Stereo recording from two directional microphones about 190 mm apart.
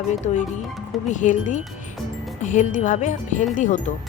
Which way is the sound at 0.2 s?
40° left (ahead or behind).